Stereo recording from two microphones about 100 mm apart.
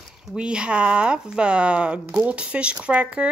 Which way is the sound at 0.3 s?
10° right (ahead or behind).